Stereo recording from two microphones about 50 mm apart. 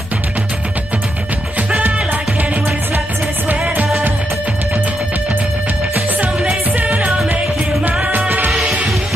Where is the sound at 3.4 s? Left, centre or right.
Right.